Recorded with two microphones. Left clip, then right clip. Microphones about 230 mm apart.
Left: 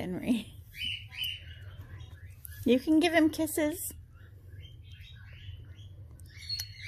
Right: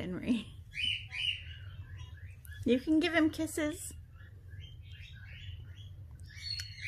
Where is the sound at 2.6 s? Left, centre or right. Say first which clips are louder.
Left 4 dB; centre.